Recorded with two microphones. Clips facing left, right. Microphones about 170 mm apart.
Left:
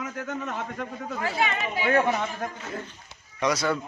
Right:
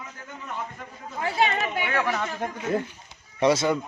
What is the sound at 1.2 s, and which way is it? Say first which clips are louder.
Speech: right 3 dB; 30° right (ahead or behind).